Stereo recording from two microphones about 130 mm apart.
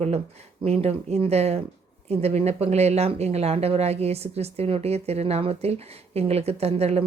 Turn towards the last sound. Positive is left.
turn(degrees=-55)  # may be behind; listen again after turning